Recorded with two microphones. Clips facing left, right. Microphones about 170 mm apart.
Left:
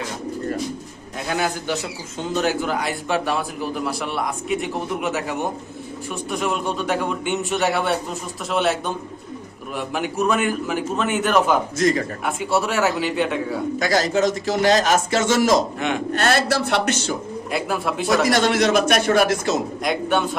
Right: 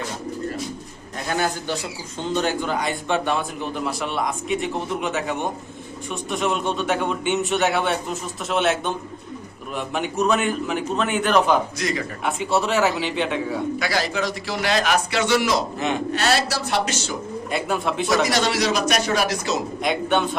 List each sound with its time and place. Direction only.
1.3 s a man's voice: 5° left (ahead or behind)
11.8 s a man's voice: 45° left (ahead or behind)
12.2 s a man's voice: centre (ahead or behind)
13.7 s a man's voice: 45° left (ahead or behind)
17.5 s a man's voice: 5° left (ahead or behind)
18.3 s a man's voice: 50° left (ahead or behind)
19.8 s a man's voice: centre (ahead or behind)